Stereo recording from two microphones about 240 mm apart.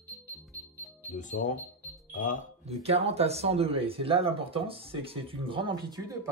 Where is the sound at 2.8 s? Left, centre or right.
Right.